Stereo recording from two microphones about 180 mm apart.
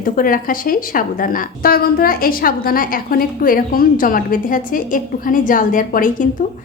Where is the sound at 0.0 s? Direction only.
50° left (ahead or behind).